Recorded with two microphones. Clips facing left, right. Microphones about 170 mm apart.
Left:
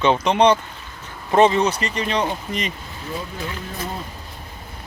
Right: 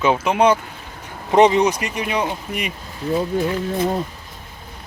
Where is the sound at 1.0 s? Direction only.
15° right (ahead or behind).